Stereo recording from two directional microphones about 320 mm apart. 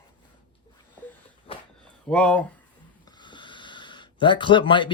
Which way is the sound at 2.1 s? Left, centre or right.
Centre.